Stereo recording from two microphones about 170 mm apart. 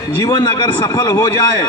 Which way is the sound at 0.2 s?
25° left (ahead or behind).